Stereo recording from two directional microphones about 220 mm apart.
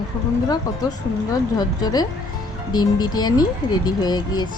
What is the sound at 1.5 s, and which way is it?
Speech, 20° left (ahead or behind).